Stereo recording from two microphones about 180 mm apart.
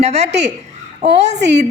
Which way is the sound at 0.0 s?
40° right (ahead or behind).